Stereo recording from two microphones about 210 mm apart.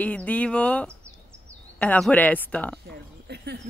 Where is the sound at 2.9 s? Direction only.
50° right (ahead or behind).